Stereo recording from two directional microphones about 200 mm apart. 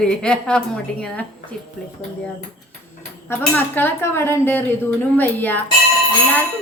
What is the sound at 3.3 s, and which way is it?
A woman's voice, 10° left (ahead or behind).